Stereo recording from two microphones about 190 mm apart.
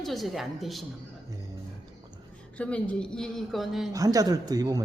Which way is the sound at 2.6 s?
5° left (ahead or behind).